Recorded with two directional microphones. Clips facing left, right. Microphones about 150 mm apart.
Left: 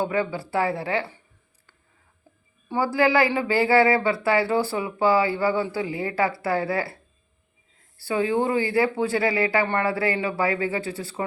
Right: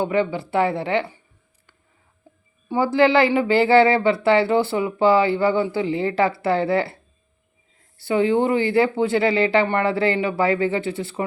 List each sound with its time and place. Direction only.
0.0 s speech: 25° right (ahead or behind)
2.6 s speech: 25° right (ahead or behind)
7.9 s speech: 25° right (ahead or behind)